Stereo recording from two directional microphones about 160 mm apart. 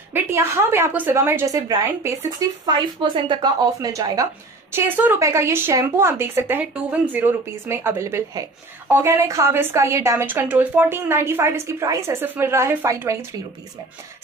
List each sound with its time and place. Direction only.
0.1 s speech: 15° right (ahead or behind)